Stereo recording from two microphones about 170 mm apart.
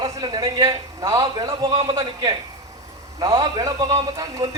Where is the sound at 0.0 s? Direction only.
25° right (ahead or behind).